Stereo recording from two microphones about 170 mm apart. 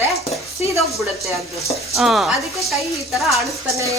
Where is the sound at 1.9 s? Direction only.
Centre (ahead or behind).